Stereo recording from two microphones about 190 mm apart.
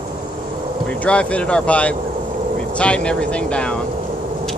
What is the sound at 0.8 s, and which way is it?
Speech, 5° left (ahead or behind).